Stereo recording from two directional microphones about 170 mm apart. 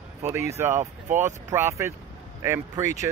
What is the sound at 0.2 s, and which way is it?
Speech, 15° right (ahead or behind).